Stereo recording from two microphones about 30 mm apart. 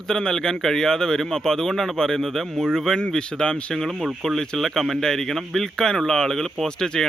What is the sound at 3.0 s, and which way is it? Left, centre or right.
Speech, left.